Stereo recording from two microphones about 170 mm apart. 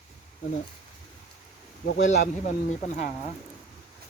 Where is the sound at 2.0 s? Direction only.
45° left (ahead or behind).